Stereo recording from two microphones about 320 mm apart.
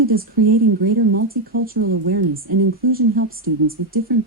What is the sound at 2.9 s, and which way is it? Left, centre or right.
Speech, right.